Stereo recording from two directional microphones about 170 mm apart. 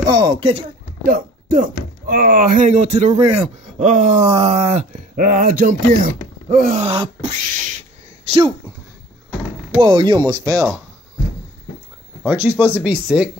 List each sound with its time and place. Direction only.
0.0 s speech: 25° right (ahead or behind)
1.0 s speech: 55° right (ahead or behind)
4.3 s speech: 35° right (ahead or behind); by 6.8 s 55° right (ahead or behind)
6.8 s beatboxing: 35° right (ahead or behind)
8.3 s speech: 30° right (ahead or behind)
9.8 s speech: 30° right (ahead or behind)
12.3 s speech: 10° right (ahead or behind)